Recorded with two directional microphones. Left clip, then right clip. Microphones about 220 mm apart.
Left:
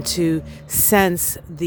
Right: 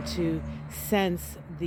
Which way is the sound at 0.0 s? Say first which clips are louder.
Left 9 dB; 45° left (ahead or behind).